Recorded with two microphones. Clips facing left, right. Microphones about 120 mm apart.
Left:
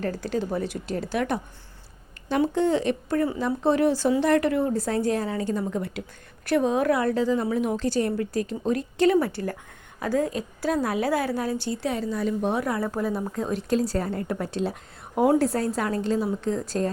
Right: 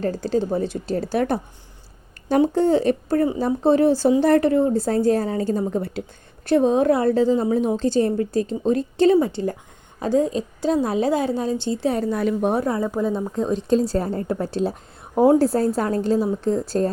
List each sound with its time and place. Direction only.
0.0 s a woman's voice: 30° right (ahead or behind)
2.5 s a woman's voice: 35° right (ahead or behind)
11.9 s a woman's voice: 55° right (ahead or behind)
12.6 s a woman's voice: 25° right (ahead or behind)